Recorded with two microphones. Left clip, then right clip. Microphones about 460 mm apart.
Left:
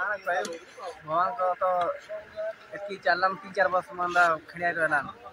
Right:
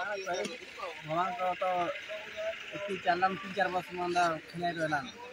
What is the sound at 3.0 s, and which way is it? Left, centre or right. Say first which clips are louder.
Speech: left 5 dB; right.